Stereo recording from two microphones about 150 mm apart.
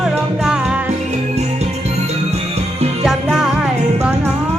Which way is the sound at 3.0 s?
5° right (ahead or behind).